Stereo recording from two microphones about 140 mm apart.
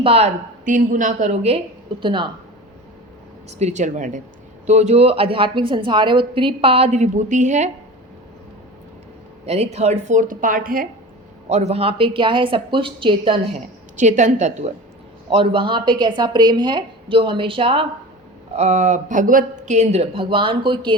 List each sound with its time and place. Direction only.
0.0 s a woman's voice: 45° right (ahead or behind)
0.6 s a woman's voice: 70° right (ahead or behind); by 2.3 s 35° right (ahead or behind)
3.6 s a woman's voice: 60° right (ahead or behind)
9.5 s speech: 50° right (ahead or behind); by 10.8 s 90° right
11.4 s a woman's voice: 55° right (ahead or behind); by 13.4 s 40° right (ahead or behind)
13.9 s speech: 60° right (ahead or behind)
15.3 s a woman's voice: 40° right (ahead or behind)
18.5 s a woman's voice: 55° right (ahead or behind); by 20.9 s 35° right (ahead or behind)